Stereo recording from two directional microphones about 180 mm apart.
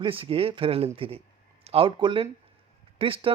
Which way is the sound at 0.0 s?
30° right (ahead or behind).